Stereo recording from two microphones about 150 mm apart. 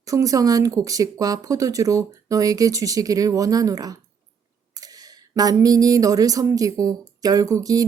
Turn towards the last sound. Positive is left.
turn(degrees=-20)  # may be behind; listen again after turning